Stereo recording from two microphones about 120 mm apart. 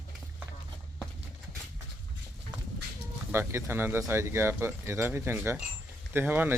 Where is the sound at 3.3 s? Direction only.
20° right (ahead or behind).